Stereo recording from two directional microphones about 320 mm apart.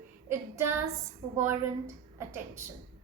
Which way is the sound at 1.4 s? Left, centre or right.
Centre.